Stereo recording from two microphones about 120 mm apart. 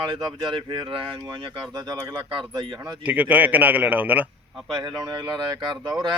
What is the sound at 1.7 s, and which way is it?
A man's voice, 30° right (ahead or behind).